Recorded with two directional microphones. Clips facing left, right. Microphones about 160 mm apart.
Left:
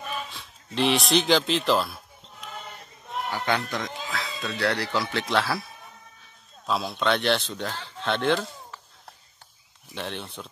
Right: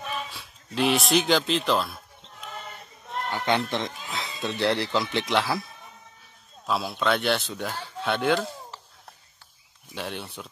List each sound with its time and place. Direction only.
0.0 s a sound: centre (ahead or behind)
3.3 s speech: 20° right (ahead or behind)
6.6 s a man's voice: centre (ahead or behind)
9.9 s speech: 5° right (ahead or behind)